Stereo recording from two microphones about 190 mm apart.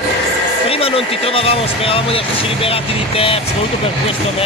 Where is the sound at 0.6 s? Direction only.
30° left (ahead or behind).